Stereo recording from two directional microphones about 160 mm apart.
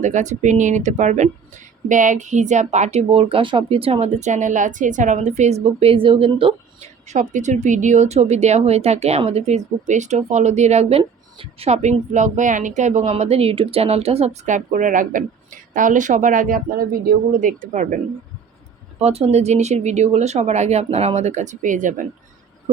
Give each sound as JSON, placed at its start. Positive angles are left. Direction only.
{"t": 0.0, "sound": "speech", "side_deg": -50}
{"t": 7.1, "sound": "speech", "side_deg": -50}
{"t": 18.9, "sound": "speech", "side_deg": -40}